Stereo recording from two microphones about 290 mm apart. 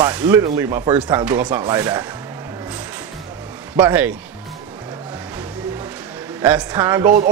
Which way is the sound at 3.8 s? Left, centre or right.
Centre.